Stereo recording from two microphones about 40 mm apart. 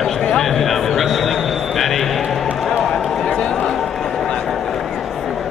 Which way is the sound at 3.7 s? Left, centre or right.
Centre.